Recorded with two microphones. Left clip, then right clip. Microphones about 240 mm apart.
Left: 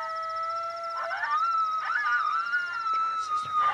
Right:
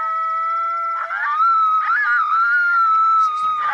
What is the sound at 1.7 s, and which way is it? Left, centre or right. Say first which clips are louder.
Dog: right 10 dB; centre.